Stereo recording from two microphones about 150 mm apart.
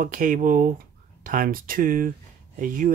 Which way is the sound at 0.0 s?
65° right (ahead or behind).